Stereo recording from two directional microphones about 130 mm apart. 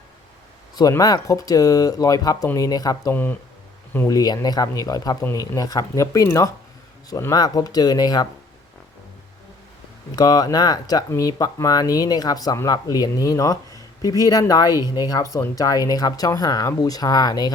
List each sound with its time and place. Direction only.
0.8 s speech: 30° left (ahead or behind)
3.1 s speech: 15° left (ahead or behind); by 8.3 s 30° left (ahead or behind)
10.1 s speech: 30° left (ahead or behind)